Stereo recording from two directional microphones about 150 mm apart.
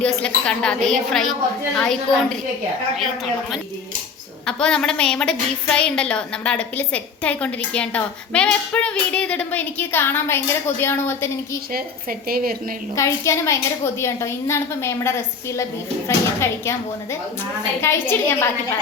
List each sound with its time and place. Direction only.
0.0 s a woman's voice: 5° left (ahead or behind)
4.4 s a woman's voice: 5° left (ahead or behind)
11.7 s a woman's voice: 75° right (ahead or behind)
13.0 s a woman's voice: 20° left (ahead or behind)